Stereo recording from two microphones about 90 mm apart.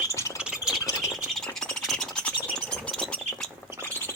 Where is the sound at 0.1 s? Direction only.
35° left (ahead or behind).